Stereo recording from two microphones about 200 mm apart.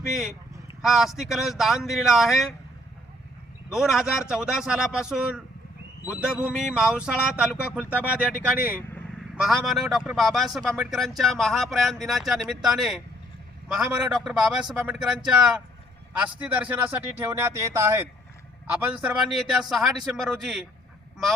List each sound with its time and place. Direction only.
0.1 s a man's voice: centre (ahead or behind)
3.7 s a man's voice: centre (ahead or behind)